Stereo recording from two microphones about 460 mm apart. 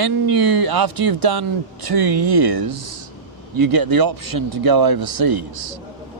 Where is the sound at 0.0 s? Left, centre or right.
Right.